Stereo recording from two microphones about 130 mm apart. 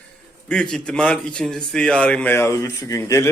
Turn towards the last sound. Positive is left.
turn(degrees=25)  # may be behind; listen again after turning